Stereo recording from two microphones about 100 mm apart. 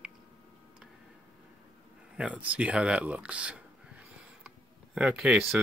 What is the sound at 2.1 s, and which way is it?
Speech, 10° right (ahead or behind).